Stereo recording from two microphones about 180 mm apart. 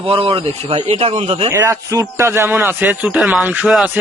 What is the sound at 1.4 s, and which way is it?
A man's voice, 15° right (ahead or behind).